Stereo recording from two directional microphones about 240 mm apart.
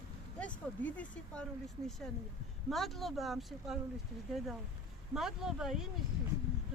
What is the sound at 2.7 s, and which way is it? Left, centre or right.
Speech, centre.